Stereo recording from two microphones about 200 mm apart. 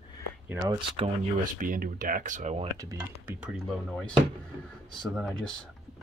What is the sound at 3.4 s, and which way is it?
Speech, centre (ahead or behind).